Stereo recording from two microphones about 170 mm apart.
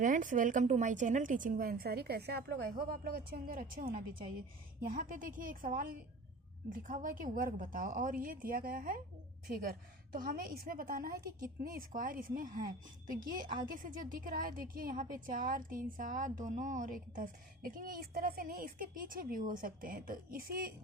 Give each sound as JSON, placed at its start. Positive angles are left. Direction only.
{"t": 0.0, "sound": "a woman's voice", "side_deg": -50}